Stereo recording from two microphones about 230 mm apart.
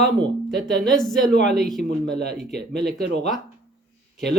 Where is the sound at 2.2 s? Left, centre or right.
Right.